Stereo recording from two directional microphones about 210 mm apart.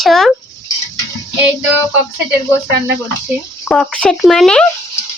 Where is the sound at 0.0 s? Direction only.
Centre (ahead or behind).